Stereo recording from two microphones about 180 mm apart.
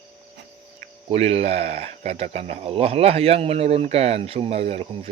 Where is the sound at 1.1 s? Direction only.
35° right (ahead or behind).